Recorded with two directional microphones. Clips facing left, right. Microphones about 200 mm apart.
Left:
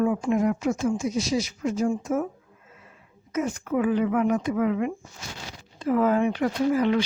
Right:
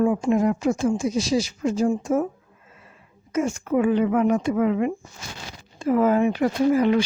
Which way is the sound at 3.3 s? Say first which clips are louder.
Right 4 dB; 25° right (ahead or behind).